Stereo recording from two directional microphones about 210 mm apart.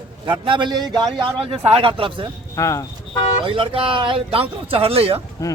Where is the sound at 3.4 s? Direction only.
25° right (ahead or behind).